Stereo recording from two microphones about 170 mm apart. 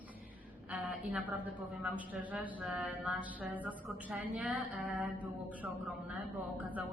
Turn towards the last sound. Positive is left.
turn(degrees=-10)  # may be behind; listen again after turning